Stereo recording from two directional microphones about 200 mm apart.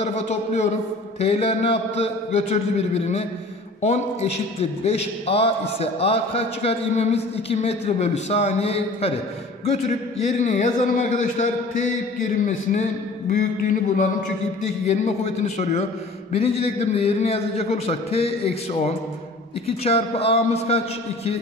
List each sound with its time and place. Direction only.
0.0 s a man's voice: 35° left (ahead or behind)